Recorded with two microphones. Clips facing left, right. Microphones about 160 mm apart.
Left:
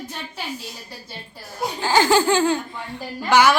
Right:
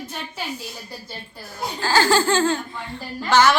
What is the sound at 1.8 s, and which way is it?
Speech, 20° left (ahead or behind).